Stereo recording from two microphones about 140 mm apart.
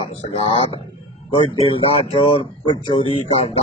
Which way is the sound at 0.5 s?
40° left (ahead or behind).